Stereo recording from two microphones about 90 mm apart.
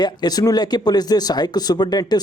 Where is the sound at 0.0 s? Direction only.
50° left (ahead or behind).